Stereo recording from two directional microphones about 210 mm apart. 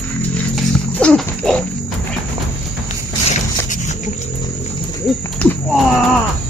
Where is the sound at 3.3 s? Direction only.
35° left (ahead or behind).